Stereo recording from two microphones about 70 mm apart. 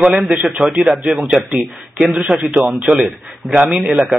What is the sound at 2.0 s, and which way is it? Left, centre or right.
A man's voice, centre.